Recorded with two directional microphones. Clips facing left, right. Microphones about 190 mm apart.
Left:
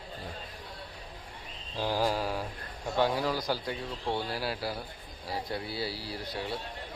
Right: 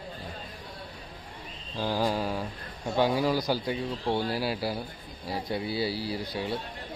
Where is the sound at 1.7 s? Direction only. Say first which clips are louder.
Right 1 dB; 5° left (ahead or behind).